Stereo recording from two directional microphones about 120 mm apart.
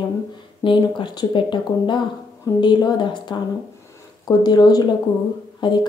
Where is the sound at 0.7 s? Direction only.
40° left (ahead or behind).